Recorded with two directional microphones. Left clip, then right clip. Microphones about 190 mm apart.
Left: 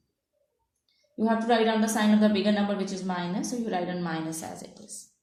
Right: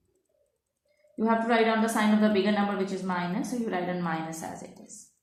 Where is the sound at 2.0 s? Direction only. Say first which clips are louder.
Left 1 dB; 35° left (ahead or behind).